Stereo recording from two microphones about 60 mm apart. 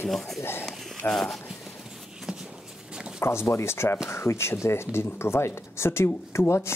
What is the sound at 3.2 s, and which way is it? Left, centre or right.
Speech, left.